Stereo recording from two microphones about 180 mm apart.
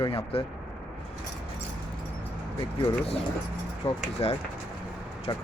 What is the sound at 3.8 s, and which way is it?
Speech, 30° left (ahead or behind).